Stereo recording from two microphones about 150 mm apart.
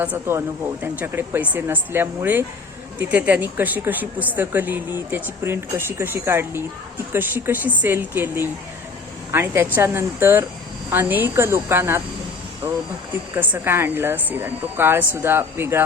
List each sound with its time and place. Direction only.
0.0 s speech: 15° right (ahead or behind)
13.3 s speech: 15° right (ahead or behind)